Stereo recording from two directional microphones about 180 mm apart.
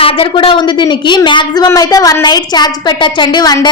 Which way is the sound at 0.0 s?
30° left (ahead or behind).